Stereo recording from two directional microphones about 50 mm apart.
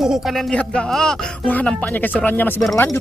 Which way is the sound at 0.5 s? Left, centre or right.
Left.